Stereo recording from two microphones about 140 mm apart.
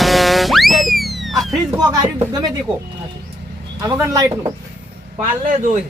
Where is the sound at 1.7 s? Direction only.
25° right (ahead or behind).